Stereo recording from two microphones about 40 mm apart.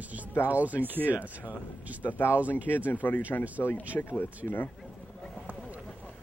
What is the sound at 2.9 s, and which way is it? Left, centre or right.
Speech, left.